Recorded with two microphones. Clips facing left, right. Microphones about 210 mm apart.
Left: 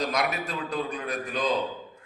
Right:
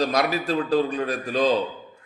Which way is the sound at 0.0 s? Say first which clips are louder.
Right 5 dB; 35° right (ahead or behind).